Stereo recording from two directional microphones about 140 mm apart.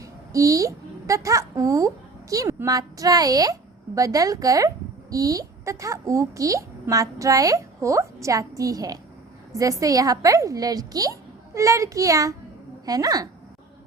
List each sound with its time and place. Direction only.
0.0 s a child's voice: 25° right (ahead or behind)